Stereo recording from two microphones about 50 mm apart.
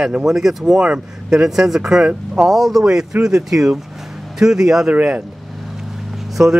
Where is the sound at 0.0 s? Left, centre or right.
Centre.